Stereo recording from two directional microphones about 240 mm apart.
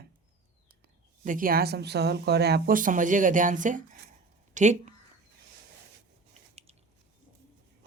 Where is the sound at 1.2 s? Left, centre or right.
Right.